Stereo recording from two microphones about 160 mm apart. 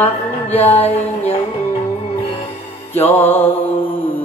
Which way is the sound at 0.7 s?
40° left (ahead or behind).